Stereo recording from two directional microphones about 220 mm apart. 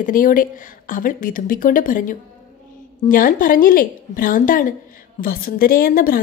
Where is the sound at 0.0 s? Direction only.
40° left (ahead or behind).